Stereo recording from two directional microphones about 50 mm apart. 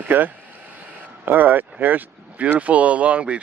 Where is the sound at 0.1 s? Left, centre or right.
Right.